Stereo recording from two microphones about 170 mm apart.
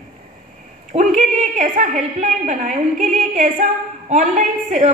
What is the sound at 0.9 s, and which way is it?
A woman's voice, 45° right (ahead or behind).